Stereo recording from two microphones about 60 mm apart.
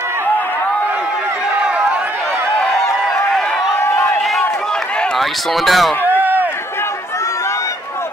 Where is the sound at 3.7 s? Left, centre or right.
Left.